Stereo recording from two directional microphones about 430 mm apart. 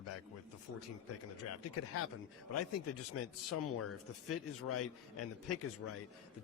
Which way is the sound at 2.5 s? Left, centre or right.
Left.